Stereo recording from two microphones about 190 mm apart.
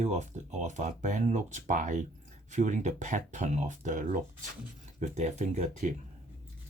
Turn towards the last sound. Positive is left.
turn(degrees=-35)  # may be behind; listen again after turning